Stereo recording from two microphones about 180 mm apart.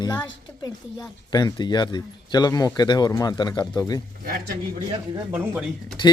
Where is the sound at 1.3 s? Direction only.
20° left (ahead or behind).